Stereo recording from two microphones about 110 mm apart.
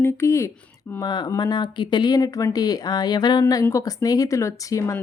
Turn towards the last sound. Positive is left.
turn(degrees=30)  # may be behind; listen again after turning